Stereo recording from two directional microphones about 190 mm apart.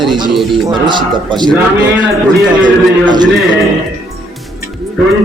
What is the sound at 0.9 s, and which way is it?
Speech, 25° right (ahead or behind).